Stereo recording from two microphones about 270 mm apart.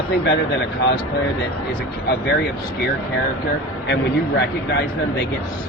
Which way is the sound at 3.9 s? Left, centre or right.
Left.